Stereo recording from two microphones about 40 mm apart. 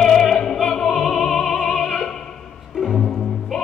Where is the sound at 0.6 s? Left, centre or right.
Centre.